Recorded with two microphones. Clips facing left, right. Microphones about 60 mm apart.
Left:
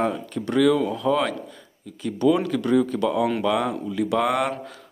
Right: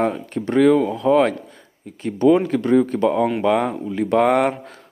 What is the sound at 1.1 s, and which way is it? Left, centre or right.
Speech, right.